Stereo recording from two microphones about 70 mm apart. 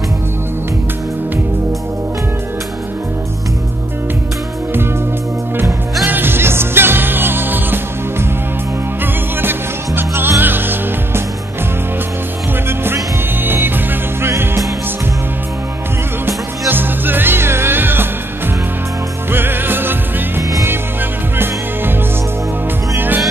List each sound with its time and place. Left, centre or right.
6.0 s music: right
9.0 s music: right
12.6 s music: right
16.3 s music: right
19.3 s music: right
22.9 s music: right